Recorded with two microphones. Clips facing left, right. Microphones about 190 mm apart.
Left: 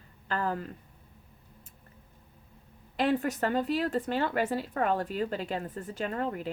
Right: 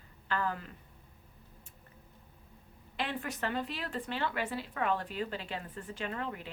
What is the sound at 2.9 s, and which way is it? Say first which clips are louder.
Speech: left 10 dB; 40° left (ahead or behind).